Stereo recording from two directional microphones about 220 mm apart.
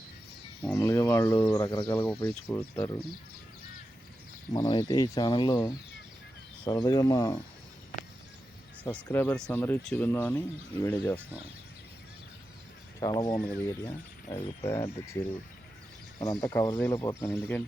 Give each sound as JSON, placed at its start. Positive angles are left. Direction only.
{"t": 0.6, "sound": "speech", "side_deg": 5}
{"t": 1.6, "sound": "speech", "side_deg": 20}
{"t": 2.2, "sound": "speech", "side_deg": 10}
{"t": 4.5, "sound": "speech", "side_deg": 20}
{"t": 8.8, "sound": "speech", "side_deg": 5}
{"t": 13.0, "sound": "speech", "side_deg": 15}
{"t": 16.2, "sound": "speech", "side_deg": 15}